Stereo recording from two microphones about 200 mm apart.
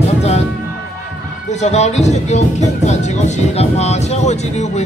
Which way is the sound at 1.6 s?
35° left (ahead or behind).